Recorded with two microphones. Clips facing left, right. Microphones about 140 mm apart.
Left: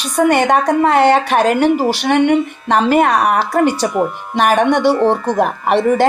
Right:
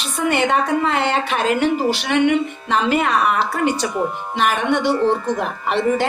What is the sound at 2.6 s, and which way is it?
A woman's voice, 55° left (ahead or behind).